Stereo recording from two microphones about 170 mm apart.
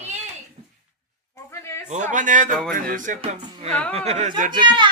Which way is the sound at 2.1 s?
50° right (ahead or behind).